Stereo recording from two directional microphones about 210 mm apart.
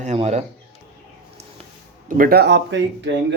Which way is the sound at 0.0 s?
30° right (ahead or behind).